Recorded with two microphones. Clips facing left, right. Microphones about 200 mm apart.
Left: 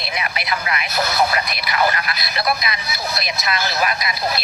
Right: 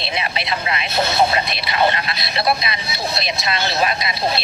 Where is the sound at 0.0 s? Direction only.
25° right (ahead or behind).